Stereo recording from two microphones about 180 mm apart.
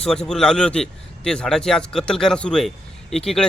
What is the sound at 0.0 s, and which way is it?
Speech, 5° left (ahead or behind).